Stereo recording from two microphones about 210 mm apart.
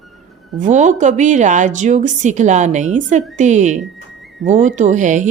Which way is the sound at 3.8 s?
Centre (ahead or behind).